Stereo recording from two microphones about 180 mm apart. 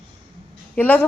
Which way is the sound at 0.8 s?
10° left (ahead or behind).